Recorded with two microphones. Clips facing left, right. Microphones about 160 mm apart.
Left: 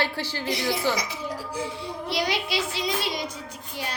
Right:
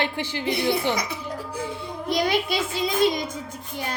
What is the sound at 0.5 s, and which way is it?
A woman's voice, 55° right (ahead or behind).